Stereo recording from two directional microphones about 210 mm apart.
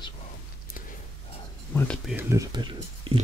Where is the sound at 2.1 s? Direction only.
15° right (ahead or behind).